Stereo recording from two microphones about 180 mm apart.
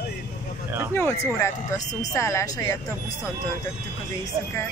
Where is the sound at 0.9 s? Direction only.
10° left (ahead or behind).